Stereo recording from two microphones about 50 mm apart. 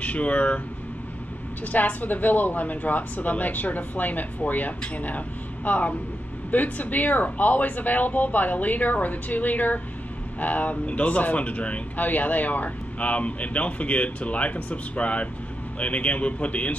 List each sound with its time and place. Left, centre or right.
0.0 s speech: left
1.7 s speech: left